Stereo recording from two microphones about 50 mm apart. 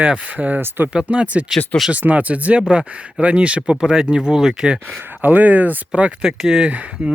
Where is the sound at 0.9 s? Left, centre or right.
Right.